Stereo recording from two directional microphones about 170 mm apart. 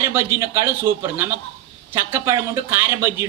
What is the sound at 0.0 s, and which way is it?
Speech, 15° right (ahead or behind).